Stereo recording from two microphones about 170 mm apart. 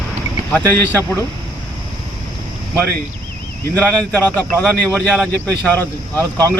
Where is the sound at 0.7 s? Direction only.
10° left (ahead or behind).